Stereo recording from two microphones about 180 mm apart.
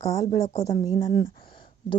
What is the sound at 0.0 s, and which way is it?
Speech, 20° left (ahead or behind).